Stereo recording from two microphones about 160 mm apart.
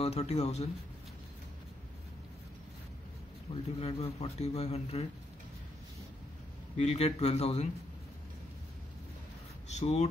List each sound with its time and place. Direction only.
0.0 s speech: 40° left (ahead or behind)
3.5 s speech: 35° left (ahead or behind)
6.8 s speech: 45° left (ahead or behind)
9.7 s speech: 45° left (ahead or behind)